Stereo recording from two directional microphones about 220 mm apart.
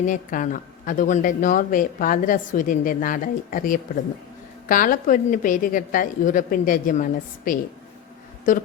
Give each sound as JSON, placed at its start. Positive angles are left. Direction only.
{"t": 0.0, "sound": "a woman's voice", "side_deg": 35}